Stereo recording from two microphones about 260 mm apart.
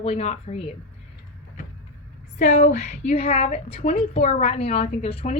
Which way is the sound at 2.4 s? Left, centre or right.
Left.